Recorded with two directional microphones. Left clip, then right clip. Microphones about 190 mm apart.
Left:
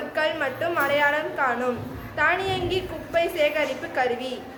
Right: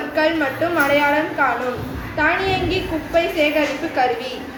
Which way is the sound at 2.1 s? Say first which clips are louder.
Right 4 dB; 15° left (ahead or behind).